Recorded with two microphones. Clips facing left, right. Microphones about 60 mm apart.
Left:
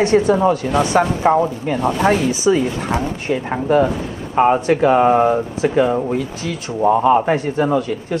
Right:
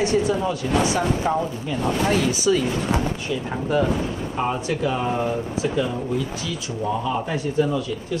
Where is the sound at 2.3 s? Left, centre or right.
Left.